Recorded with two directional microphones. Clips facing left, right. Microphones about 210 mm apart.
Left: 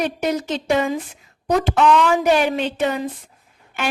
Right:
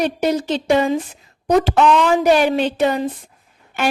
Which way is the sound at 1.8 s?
25° right (ahead or behind).